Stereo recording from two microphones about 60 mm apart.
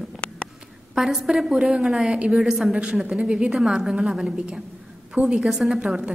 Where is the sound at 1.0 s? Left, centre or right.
Centre.